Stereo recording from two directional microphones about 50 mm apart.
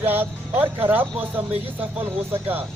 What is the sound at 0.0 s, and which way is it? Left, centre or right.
Speech, right.